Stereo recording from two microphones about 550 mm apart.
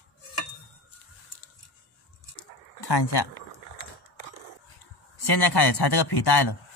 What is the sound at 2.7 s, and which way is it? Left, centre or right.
Speech, left.